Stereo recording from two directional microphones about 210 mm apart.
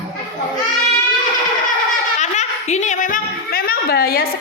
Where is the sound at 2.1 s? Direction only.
35° left (ahead or behind).